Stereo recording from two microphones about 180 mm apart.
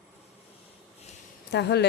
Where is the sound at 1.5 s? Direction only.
70° left (ahead or behind).